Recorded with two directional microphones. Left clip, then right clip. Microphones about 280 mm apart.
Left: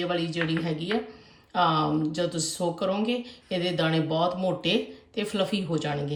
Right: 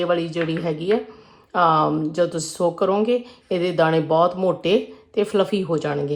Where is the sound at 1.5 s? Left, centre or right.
Centre.